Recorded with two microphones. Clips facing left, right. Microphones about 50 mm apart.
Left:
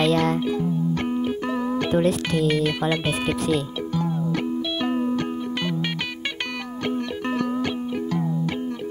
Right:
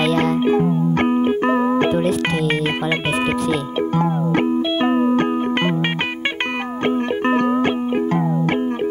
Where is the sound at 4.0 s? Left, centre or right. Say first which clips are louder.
Right 5 dB; right.